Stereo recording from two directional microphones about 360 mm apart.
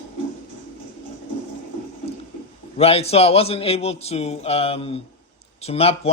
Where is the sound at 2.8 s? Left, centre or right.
Centre.